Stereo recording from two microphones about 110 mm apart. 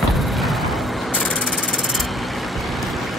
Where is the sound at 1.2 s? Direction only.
10° left (ahead or behind).